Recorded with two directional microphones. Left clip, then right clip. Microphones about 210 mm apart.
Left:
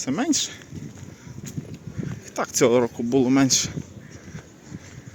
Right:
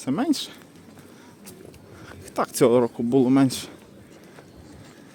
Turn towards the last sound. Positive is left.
turn(degrees=-10)  # may be behind; listen again after turning